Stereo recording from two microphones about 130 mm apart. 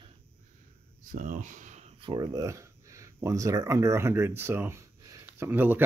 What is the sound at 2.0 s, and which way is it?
Speech, 35° right (ahead or behind).